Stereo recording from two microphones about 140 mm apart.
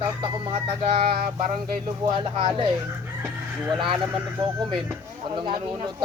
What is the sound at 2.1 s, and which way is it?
Chicken, 40° right (ahead or behind).